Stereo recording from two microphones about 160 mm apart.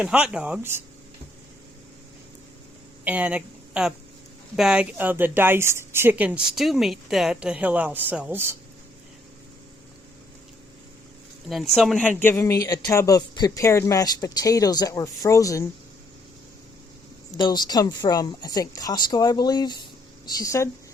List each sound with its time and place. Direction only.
0.0 s speech: 5° right (ahead or behind)
3.0 s speech: 10° right (ahead or behind)
11.7 s speech: centre (ahead or behind); by 15.6 s 20° left (ahead or behind)
17.3 s speech: 25° left (ahead or behind)